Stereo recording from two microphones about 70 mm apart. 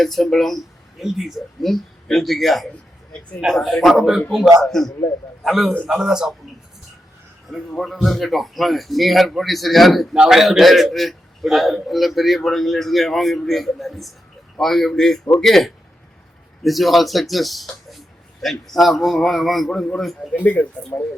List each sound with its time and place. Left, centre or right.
0.0 s a man's voice: centre
7.8 s a man's voice: centre
20.3 s speech: left